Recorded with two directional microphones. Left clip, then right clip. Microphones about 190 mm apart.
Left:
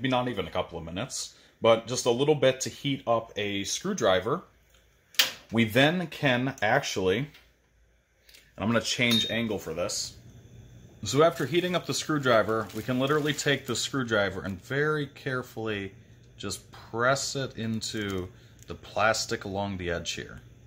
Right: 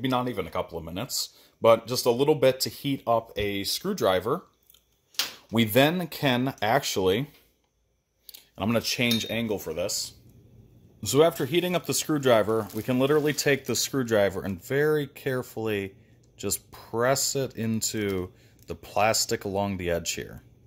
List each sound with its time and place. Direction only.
0.0 s speech: 40° right (ahead or behind)
5.5 s speech: 40° right (ahead or behind)
8.5 s speech: 30° right (ahead or behind); by 20.3 s 45° right (ahead or behind)